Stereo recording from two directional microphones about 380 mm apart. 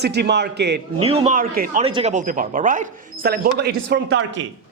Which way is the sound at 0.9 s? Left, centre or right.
Centre.